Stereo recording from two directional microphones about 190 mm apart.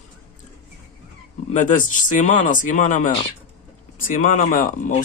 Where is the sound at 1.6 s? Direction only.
40° left (ahead or behind).